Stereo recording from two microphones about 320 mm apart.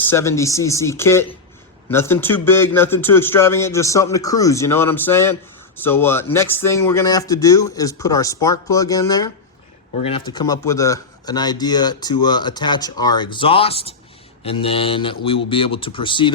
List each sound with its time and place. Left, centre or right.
0.1 s a man's voice: centre